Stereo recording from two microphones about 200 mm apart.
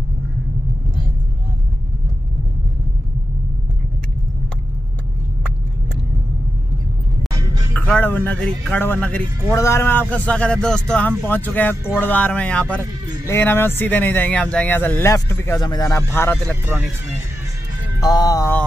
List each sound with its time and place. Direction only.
7.7 s a man's voice: 5° left (ahead or behind)
18.0 s music: 20° left (ahead or behind)